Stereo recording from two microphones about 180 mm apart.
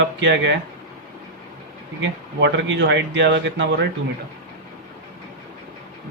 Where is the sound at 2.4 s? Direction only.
80° right.